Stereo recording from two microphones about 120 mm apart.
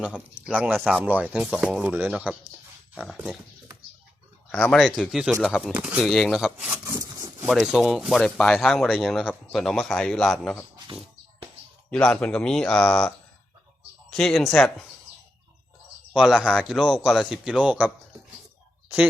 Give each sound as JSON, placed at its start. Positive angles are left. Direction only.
{"t": 0.4, "sound": "speech", "side_deg": -10}
{"t": 4.5, "sound": "speech", "side_deg": 5}
{"t": 6.0, "sound": "speech", "side_deg": 0}
{"t": 6.6, "sound": "a sound", "side_deg": -20}
{"t": 7.0, "sound": "a sound", "side_deg": -30}
{"t": 7.4, "sound": "speech", "side_deg": 0}
{"t": 11.9, "sound": "speech", "side_deg": 10}
{"t": 16.1, "sound": "speech", "side_deg": -5}